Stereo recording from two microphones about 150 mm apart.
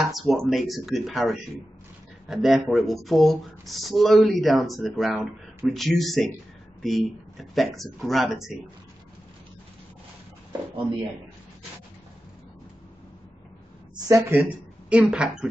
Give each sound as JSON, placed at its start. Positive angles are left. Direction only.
{"t": 0.0, "sound": "speech", "side_deg": 0}
{"t": 13.9, "sound": "speech", "side_deg": -25}
{"t": 14.9, "sound": "speech", "side_deg": -5}